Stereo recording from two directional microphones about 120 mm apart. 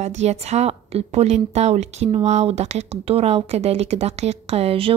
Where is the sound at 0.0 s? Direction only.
70° right (ahead or behind).